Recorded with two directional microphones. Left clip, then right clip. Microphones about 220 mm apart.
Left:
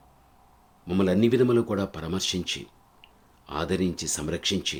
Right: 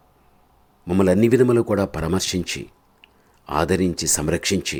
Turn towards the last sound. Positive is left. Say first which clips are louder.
# right 5 dB
turn(degrees=-30)  # may be behind; listen again after turning